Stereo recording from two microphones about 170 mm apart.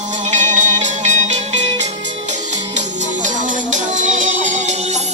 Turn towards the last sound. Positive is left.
turn(degrees=-45)  # may be behind; listen again after turning